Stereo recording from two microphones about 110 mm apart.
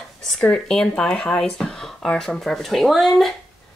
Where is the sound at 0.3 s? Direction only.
10° left (ahead or behind).